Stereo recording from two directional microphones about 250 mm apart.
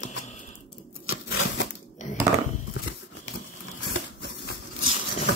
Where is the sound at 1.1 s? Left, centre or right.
Left.